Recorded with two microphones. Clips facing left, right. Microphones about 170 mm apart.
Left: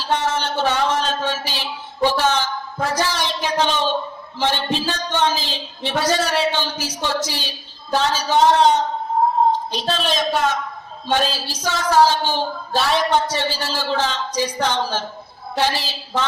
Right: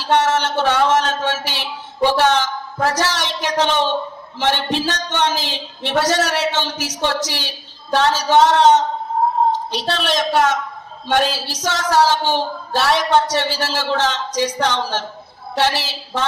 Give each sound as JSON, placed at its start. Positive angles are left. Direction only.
{"t": 0.1, "sound": "speech", "side_deg": -70}